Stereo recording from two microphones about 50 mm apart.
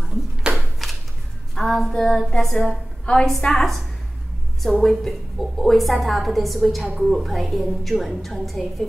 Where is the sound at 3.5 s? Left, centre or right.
Centre.